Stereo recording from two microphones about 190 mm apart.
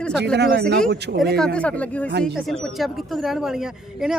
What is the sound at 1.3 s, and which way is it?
Speech, 5° left (ahead or behind).